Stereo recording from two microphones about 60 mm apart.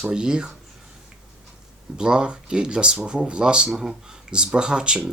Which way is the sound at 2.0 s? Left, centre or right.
Centre.